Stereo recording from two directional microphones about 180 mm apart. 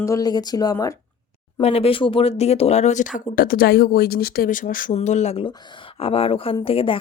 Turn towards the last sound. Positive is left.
turn(degrees=30)  # may be behind; listen again after turning